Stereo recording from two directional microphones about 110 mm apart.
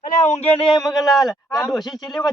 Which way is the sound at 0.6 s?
45° left (ahead or behind).